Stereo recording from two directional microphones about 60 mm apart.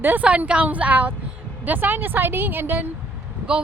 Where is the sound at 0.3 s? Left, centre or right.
Centre; by 2.9 s right.